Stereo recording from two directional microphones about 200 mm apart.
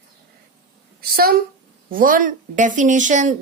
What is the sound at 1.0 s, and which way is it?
A woman's voice, 50° right (ahead or behind).